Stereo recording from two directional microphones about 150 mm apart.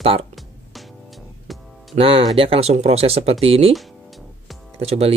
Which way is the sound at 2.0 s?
40° right (ahead or behind).